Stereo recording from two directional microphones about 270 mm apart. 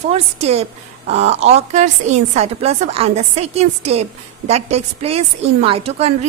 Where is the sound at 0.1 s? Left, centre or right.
Right.